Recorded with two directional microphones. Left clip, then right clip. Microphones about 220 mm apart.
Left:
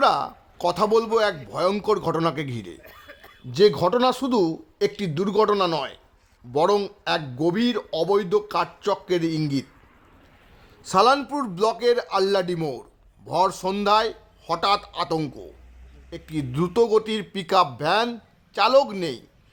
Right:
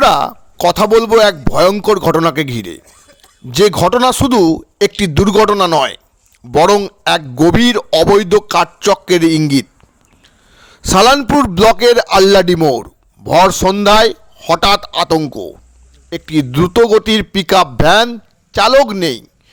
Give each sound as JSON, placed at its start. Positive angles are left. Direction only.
{"t": 0.0, "sound": "a man's voice", "side_deg": -35}
{"t": 2.8, "sound": "a sound", "side_deg": -60}
{"t": 3.5, "sound": "a man's voice", "side_deg": -35}